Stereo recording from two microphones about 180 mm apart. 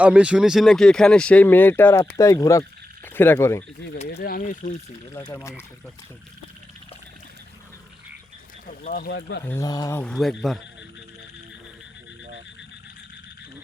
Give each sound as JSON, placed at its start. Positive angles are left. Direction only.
{"t": 0.0, "sound": "speech", "side_deg": -5}
{"t": 3.9, "sound": "speech", "side_deg": 35}
{"t": 4.2, "sound": "speech", "side_deg": 55}
{"t": 5.2, "sound": "speech", "side_deg": 15}
{"t": 8.8, "sound": "speech", "side_deg": 55}
{"t": 9.4, "sound": "speech", "side_deg": 15}
{"t": 10.0, "sound": "a man's voice", "side_deg": 5}